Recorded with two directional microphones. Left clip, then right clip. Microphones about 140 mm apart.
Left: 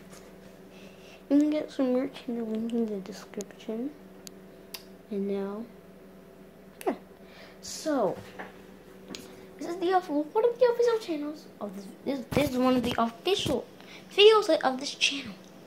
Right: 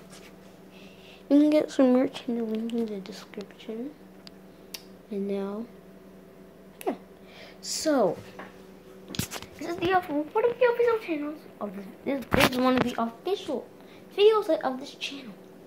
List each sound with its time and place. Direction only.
1.3 s speech: 30° right (ahead or behind)
1.9 s speech: 25° right (ahead or behind)
2.6 s a woman's voice: 10° left (ahead or behind)
5.2 s speech: 10° right (ahead or behind)
6.8 s a sound: 5° left (ahead or behind)
7.8 s speech: 45° right (ahead or behind)
9.1 s a sound: centre (ahead or behind)
9.8 s a woman's voice: 15° left (ahead or behind)